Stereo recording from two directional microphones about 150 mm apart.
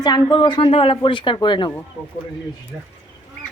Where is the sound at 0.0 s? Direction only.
25° left (ahead or behind).